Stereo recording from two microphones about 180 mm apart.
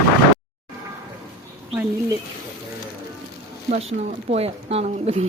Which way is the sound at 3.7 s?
35° right (ahead or behind).